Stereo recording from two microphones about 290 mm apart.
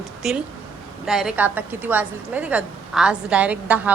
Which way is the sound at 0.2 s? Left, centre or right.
Centre.